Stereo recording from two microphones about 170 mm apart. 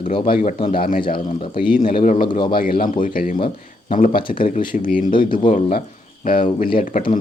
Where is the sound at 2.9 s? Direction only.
55° left (ahead or behind).